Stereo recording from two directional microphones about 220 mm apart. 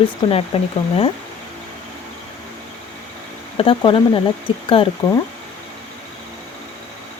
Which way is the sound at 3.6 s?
25° left (ahead or behind).